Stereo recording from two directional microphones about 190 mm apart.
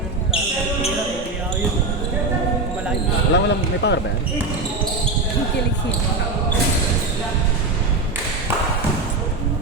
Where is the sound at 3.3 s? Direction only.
65° left (ahead or behind).